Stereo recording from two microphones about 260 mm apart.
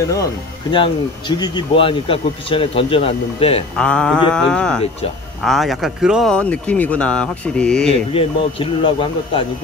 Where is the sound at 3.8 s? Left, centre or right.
Centre.